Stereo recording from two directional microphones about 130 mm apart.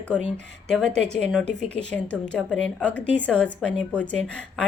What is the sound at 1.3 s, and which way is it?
Speech, 5° left (ahead or behind).